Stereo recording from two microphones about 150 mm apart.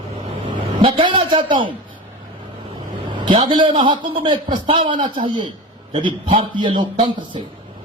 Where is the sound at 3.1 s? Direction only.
30° right (ahead or behind).